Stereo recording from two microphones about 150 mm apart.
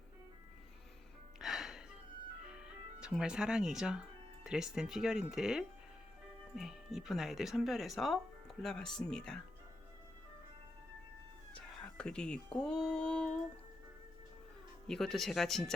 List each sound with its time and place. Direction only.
1.4 s music: centre (ahead or behind)
2.5 s speech: 5° right (ahead or behind)
11.5 s a sound: 5° left (ahead or behind)
14.8 s speech: centre (ahead or behind)